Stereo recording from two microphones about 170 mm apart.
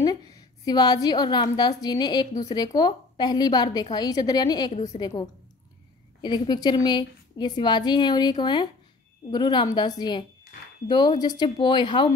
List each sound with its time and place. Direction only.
0.7 s a woman's voice: 25° left (ahead or behind)